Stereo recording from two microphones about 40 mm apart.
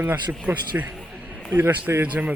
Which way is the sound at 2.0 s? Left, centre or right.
Right.